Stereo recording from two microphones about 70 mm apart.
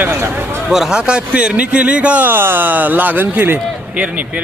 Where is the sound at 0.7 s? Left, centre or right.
Centre.